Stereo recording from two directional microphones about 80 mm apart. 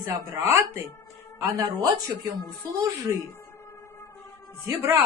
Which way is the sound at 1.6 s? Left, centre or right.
Right.